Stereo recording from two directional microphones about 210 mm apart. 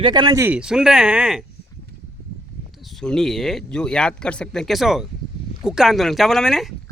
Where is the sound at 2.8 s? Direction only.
Centre (ahead or behind).